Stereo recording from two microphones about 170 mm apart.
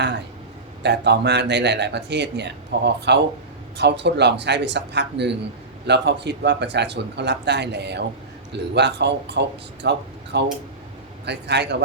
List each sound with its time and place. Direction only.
0.8 s speech: 85° right